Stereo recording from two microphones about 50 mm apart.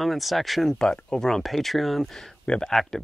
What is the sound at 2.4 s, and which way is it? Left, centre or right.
Speech, centre.